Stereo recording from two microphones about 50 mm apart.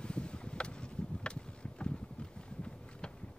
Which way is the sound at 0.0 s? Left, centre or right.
Centre.